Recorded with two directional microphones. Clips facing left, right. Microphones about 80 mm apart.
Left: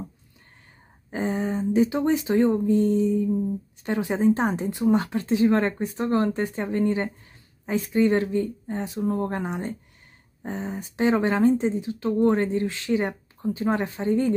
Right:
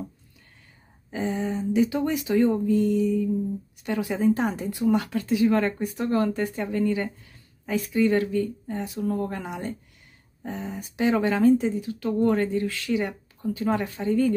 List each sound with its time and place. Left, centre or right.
1.1 s speech: left